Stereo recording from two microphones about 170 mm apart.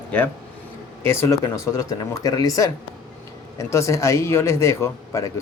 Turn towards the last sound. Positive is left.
turn(degrees=20)  # may be behind; listen again after turning